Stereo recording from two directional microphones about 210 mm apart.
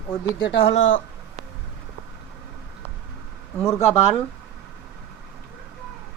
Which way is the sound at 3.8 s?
30° left (ahead or behind).